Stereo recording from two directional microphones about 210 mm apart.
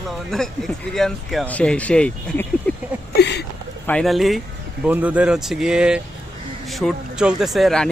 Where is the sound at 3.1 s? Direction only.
55° left (ahead or behind).